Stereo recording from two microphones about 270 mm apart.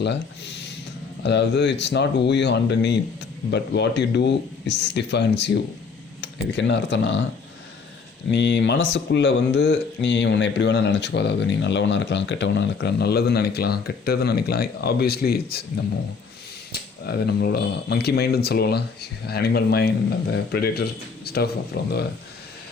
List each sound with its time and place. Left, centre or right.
0.0 s speech: left
8.3 s speech: left